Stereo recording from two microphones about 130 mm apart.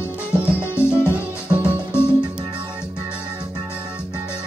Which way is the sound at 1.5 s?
10° right (ahead or behind).